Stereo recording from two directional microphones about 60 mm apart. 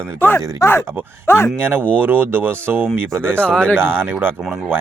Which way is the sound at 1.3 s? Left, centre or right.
Left.